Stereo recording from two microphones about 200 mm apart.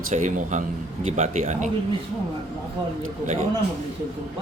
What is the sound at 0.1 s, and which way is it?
A man's voice, 40° right (ahead or behind).